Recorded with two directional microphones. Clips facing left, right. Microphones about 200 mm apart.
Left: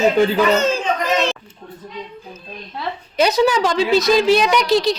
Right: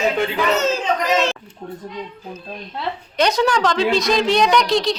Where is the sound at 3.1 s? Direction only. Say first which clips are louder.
Left 2 dB; 5° left (ahead or behind).